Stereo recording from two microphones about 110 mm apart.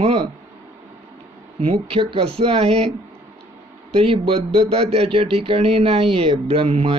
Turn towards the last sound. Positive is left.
turn(degrees=-65)  # may be behind; listen again after turning